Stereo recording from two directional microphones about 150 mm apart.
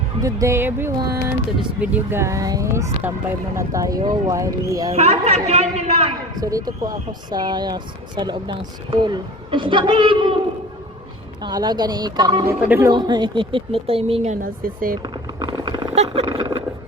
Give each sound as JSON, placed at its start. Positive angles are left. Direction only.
{"t": 0.2, "sound": "speech", "side_deg": -20}
{"t": 4.9, "sound": "a man's voice", "side_deg": -45}
{"t": 6.4, "sound": "speech", "side_deg": -25}
{"t": 11.4, "sound": "speech", "side_deg": -30}
{"t": 12.5, "sound": "speech", "side_deg": -15}
{"t": 12.9, "sound": "speech", "side_deg": -30}
{"t": 14.4, "sound": "speech", "side_deg": -70}
{"t": 15.0, "sound": "a sound", "side_deg": -30}
{"t": 16.0, "sound": "speech", "side_deg": -40}